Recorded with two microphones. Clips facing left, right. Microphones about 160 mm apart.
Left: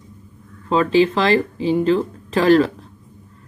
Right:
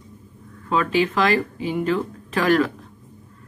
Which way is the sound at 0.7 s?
30° left (ahead or behind).